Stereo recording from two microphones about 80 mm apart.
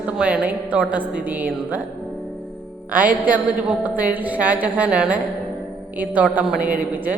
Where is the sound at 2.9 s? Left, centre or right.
Centre.